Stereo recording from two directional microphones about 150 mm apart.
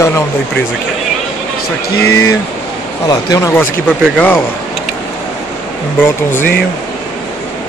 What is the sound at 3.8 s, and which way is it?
Speech, centre (ahead or behind).